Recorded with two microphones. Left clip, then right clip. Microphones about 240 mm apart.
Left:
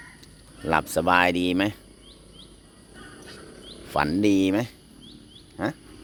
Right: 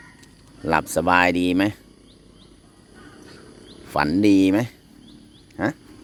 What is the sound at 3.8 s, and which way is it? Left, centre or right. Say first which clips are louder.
Speech: right 3 dB; centre.